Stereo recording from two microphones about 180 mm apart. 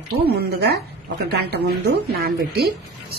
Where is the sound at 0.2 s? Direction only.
60° right (ahead or behind).